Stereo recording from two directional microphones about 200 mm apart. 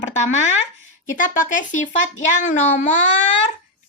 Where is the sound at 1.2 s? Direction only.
40° left (ahead or behind).